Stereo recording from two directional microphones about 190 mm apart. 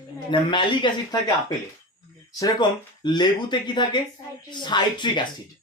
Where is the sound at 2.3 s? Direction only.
20° left (ahead or behind).